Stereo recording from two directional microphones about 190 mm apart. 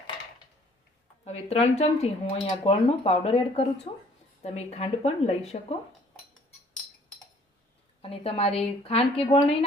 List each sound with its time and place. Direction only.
1.2 s speech: 35° left (ahead or behind)
8.0 s speech: 30° left (ahead or behind)